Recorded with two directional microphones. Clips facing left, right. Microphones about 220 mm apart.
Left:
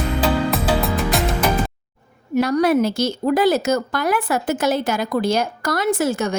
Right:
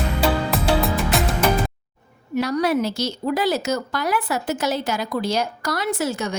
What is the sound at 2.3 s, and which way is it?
Speech, 50° left (ahead or behind).